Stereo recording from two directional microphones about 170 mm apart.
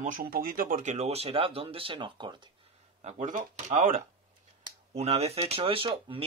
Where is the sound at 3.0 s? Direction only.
45° right (ahead or behind).